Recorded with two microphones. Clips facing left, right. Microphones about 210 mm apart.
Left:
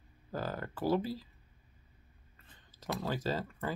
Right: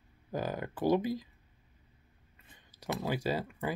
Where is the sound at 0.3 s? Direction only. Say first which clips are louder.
Right 3 dB; 15° right (ahead or behind).